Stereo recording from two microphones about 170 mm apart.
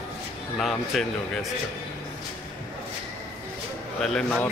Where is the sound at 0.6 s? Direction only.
Centre (ahead or behind).